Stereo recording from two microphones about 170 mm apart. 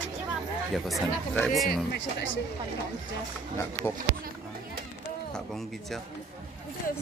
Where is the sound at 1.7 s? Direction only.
90° left.